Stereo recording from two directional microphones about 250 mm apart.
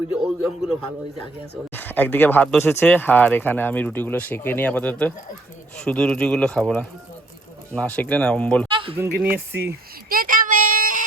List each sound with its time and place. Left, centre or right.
0.1 s speech: centre
8.7 s a sound: right
9.0 s speech: centre
10.1 s child singing: right